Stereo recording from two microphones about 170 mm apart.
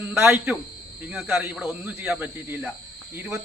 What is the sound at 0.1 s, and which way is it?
Speech, 10° right (ahead or behind).